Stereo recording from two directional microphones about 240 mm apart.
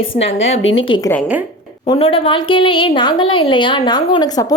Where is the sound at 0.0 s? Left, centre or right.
Left.